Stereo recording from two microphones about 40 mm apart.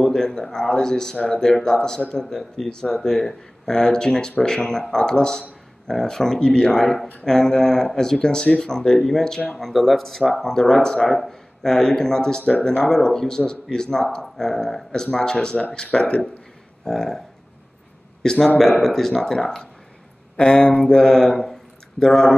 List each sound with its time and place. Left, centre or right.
0.1 s speech: centre
2.3 s speech: centre
11.1 s speech: centre; by 16.3 s left
16.8 s speech: centre
18.2 s speech: centre
21.3 s speech: centre